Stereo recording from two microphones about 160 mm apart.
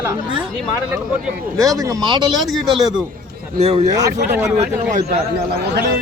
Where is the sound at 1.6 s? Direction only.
20° right (ahead or behind).